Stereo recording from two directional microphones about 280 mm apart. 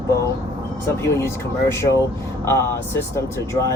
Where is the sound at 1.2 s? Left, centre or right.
Centre.